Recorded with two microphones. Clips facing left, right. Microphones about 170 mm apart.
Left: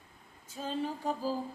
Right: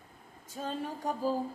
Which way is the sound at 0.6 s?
45° right (ahead or behind).